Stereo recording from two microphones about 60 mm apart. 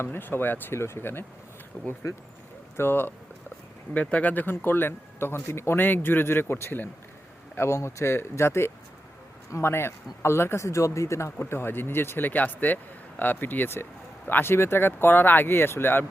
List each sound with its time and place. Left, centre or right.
0.0 s speech: left
0.8 s speech: left
1.8 s speech: left
2.7 s speech: left
4.0 s speech: left
7.5 s speech: left